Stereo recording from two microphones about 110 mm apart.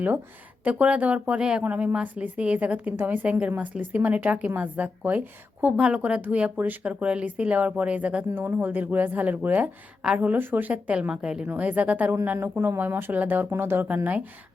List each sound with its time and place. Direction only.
0.6 s speech: 10° right (ahead or behind)